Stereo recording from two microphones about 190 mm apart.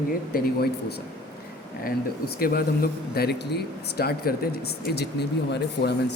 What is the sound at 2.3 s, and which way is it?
Speech, 50° left (ahead or behind).